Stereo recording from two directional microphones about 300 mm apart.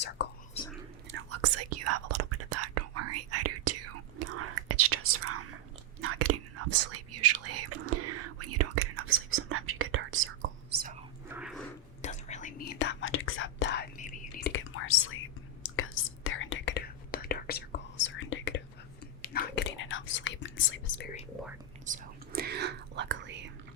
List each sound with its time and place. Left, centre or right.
0.2 s whispering: left
0.6 s whispering: centre
1.1 s whispering: right
11.3 s dog: centre
12.0 s whispering: left
12.8 s whispering: left
21.8 s whispering: right